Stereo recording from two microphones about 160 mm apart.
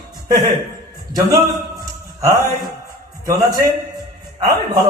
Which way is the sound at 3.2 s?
20° right (ahead or behind).